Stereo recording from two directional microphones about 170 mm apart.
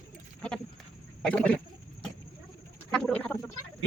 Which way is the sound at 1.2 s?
5° left (ahead or behind).